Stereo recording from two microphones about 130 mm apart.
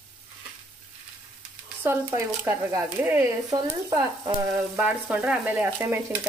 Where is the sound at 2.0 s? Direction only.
20° right (ahead or behind).